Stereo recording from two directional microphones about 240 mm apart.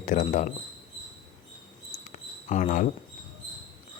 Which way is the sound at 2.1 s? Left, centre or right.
Left.